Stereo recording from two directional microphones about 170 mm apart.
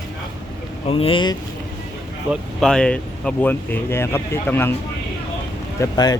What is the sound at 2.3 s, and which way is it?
Speech, 5° left (ahead or behind).